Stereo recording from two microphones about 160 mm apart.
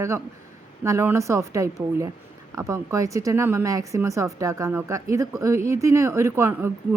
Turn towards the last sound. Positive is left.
turn(degrees=-15)  # may be behind; listen again after turning